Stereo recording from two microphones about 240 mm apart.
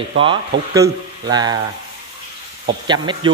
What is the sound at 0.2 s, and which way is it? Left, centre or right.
A man's voice, centre.